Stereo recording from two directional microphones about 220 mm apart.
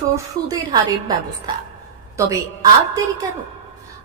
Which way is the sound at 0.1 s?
15° right (ahead or behind).